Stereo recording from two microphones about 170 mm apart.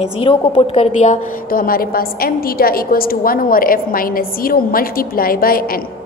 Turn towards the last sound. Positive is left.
turn(degrees=60)  # may be behind; listen again after turning